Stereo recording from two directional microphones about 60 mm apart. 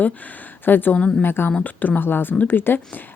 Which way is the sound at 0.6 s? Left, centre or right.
Left.